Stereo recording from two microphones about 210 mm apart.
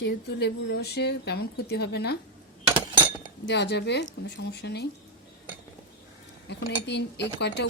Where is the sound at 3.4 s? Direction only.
55° left (ahead or behind).